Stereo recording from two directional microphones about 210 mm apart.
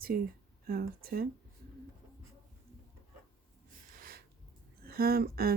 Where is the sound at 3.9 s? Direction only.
45° right (ahead or behind).